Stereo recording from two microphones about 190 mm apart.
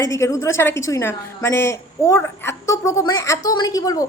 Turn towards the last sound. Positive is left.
turn(degrees=20)  # may be behind; listen again after turning